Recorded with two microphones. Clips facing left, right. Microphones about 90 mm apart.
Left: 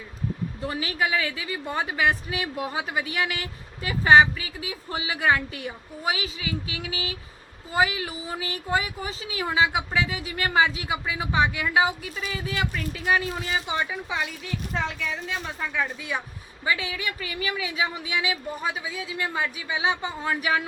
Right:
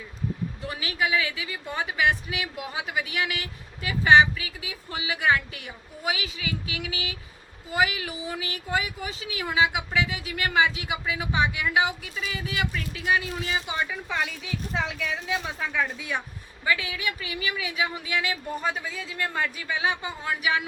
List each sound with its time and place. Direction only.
0.7 s a woman's voice: 35° left (ahead or behind)
14.1 s a woman's voice: centre (ahead or behind)
16.6 s a woman's voice: 30° left (ahead or behind)
20.2 s a woman's voice: 35° left (ahead or behind)